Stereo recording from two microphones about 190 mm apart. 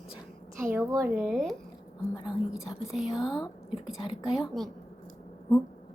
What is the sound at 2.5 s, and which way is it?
Speech, 5° right (ahead or behind).